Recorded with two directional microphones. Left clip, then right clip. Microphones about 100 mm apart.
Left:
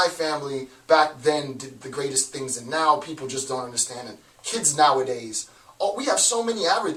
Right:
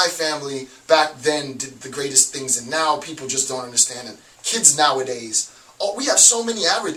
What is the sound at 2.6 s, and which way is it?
Speech, centre (ahead or behind).